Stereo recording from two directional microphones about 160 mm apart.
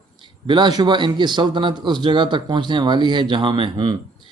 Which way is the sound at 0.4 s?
30° right (ahead or behind).